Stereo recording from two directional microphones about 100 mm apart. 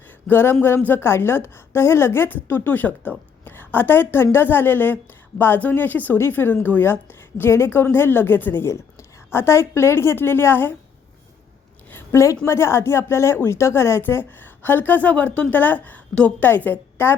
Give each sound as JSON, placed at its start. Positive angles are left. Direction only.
{"t": 0.3, "sound": "speech", "side_deg": 20}
{"t": 11.9, "sound": "a sound", "side_deg": 25}
{"t": 12.5, "sound": "speech", "side_deg": 25}